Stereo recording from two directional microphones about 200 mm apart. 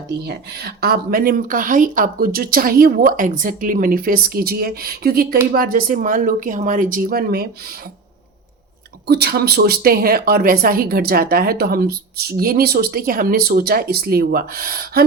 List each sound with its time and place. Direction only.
0.1 s a woman's voice: 55° right (ahead or behind)
9.0 s a woman's voice: 55° right (ahead or behind)